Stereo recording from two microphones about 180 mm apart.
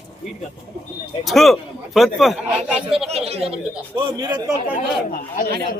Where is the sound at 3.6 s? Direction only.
5° right (ahead or behind).